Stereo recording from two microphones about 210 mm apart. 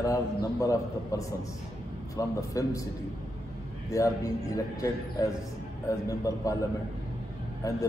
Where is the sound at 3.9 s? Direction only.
15° left (ahead or behind).